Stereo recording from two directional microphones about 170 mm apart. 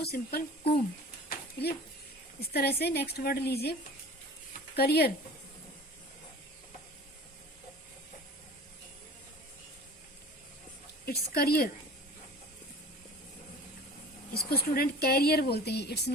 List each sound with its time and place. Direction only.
0.0 s speech: 70° left (ahead or behind)
1.3 s a sound: 70° left (ahead or behind)
2.5 s speech: 70° left (ahead or behind)
4.8 s speech: 70° left (ahead or behind)
11.0 s speech: 65° left (ahead or behind)
14.3 s speech: 65° left (ahead or behind)